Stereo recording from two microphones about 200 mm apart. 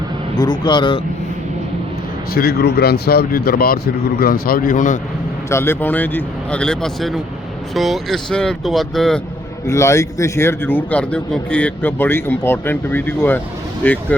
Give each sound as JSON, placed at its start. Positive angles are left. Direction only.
{"t": 0.3, "sound": "a man's voice", "side_deg": 20}
{"t": 2.3, "sound": "a man's voice", "side_deg": 50}
{"t": 5.5, "sound": "a man's voice", "side_deg": 10}
{"t": 9.6, "sound": "a man's voice", "side_deg": 15}